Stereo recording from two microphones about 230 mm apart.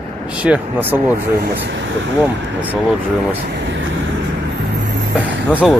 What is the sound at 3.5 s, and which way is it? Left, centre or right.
Speech, right.